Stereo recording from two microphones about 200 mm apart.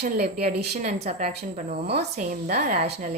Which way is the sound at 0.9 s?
30° right (ahead or behind).